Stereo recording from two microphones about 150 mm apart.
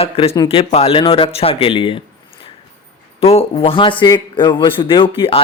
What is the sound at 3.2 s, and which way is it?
A man's voice, 40° left (ahead or behind).